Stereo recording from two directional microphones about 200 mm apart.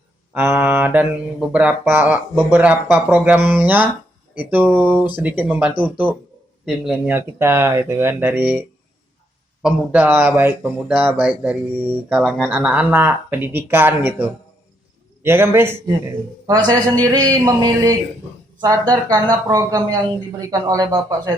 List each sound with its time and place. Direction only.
0.3 s speech: 10° right (ahead or behind)
9.6 s a man's voice: 5° right (ahead or behind)